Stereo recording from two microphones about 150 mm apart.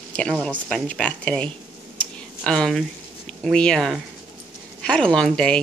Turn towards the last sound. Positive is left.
turn(degrees=5)  # may be behind; listen again after turning